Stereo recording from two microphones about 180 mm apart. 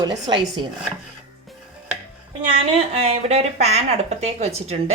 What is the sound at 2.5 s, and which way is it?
A woman's voice, 35° right (ahead or behind).